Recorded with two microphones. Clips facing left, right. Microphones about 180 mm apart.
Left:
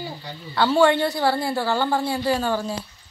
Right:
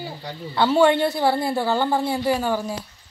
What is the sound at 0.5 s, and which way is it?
A woman's voice, 20° right (ahead or behind).